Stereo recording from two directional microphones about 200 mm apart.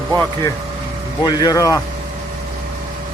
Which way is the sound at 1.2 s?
20° left (ahead or behind).